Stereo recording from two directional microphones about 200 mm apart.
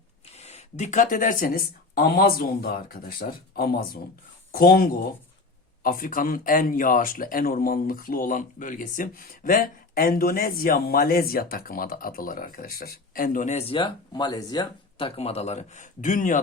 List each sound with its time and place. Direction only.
0.3 s speech: 30° left (ahead or behind)